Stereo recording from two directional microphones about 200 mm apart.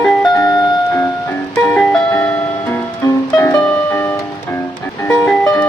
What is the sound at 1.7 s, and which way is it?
Music, 5° left (ahead or behind).